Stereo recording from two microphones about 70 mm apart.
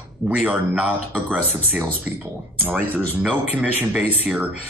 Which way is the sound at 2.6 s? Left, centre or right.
Right.